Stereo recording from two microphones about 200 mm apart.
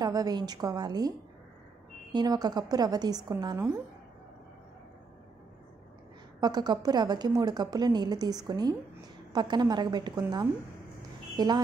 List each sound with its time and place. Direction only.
0.0 s a woman's voice: 20° right (ahead or behind)
2.1 s a woman's voice: 20° right (ahead or behind)
6.4 s a woman's voice: 20° right (ahead or behind)
11.3 s a woman's voice: 20° right (ahead or behind)